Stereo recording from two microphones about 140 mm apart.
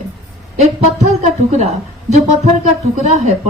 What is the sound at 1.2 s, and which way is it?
A woman's voice, 55° right (ahead or behind).